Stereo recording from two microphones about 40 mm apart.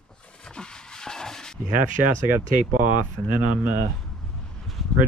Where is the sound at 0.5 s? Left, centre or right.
Left.